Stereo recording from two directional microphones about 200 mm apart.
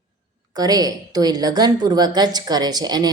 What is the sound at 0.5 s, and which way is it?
A woman's voice, 20° right (ahead or behind).